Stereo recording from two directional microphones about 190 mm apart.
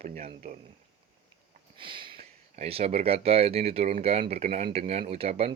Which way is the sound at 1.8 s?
25° right (ahead or behind).